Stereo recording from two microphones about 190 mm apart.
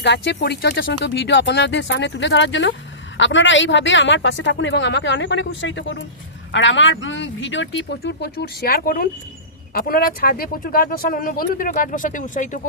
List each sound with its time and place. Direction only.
0.0 s speech: 65° left (ahead or behind); by 12.5 s 40° left (ahead or behind)